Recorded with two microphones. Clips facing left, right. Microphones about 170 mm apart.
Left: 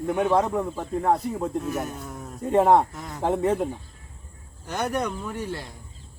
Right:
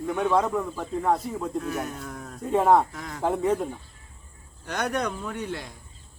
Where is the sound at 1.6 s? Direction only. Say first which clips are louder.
Left 1 dB; centre (ahead or behind).